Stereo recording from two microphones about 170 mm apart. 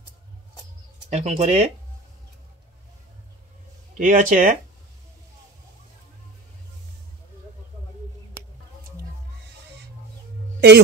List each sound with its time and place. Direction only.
1.1 s speech: 40° right (ahead or behind)
3.9 s speech: 50° right (ahead or behind)
10.6 s a man's voice: 80° right